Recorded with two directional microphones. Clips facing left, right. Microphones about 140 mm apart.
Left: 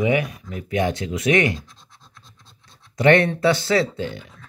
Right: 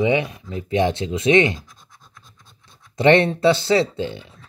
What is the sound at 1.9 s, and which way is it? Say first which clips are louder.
Scratch: right 1 dB; 50° right (ahead or behind).